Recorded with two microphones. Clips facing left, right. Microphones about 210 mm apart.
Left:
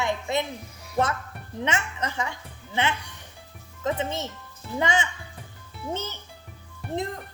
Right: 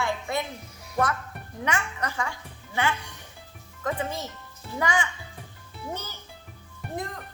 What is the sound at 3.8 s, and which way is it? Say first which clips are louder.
Speech: left 2 dB; 25° left (ahead or behind).